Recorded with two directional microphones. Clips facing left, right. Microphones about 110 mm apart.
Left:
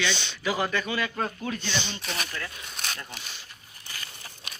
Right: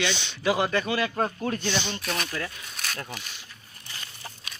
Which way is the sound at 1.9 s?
50° right (ahead or behind).